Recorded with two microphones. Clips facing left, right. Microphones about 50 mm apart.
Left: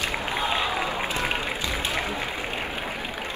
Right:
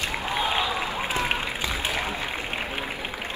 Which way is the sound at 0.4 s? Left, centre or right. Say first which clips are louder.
Even; left.